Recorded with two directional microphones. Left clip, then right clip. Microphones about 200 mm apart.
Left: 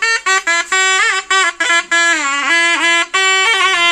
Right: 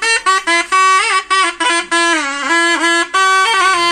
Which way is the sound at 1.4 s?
25° left (ahead or behind).